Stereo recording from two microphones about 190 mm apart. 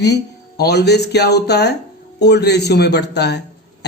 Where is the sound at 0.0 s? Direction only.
60° left (ahead or behind).